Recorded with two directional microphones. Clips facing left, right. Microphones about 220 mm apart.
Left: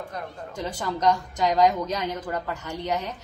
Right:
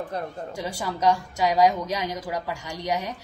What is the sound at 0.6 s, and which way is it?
A woman's voice, 10° right (ahead or behind).